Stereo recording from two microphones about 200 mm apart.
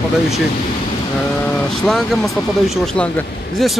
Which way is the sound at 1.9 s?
Centre (ahead or behind).